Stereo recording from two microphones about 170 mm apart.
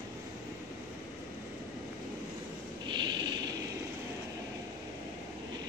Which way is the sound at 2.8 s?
25° right (ahead or behind).